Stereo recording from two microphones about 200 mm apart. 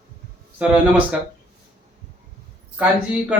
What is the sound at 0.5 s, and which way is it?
Speech, 5° right (ahead or behind).